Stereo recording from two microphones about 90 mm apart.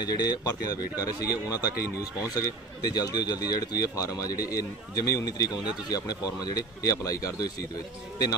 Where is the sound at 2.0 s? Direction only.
20° right (ahead or behind).